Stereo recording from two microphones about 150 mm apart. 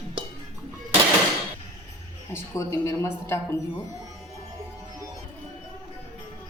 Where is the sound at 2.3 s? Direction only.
15° left (ahead or behind).